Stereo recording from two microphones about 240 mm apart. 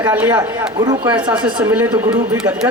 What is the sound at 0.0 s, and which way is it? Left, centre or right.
A man's voice, centre.